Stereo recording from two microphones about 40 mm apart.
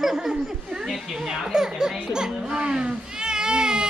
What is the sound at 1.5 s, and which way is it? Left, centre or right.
A child's voice, centre.